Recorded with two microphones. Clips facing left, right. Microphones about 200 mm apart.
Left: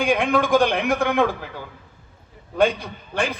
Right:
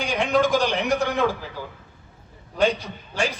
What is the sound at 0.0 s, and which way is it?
A man's voice, 55° left (ahead or behind).